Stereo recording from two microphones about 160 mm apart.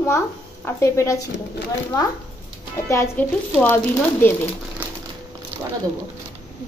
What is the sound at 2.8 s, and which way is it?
Speech, 15° left (ahead or behind).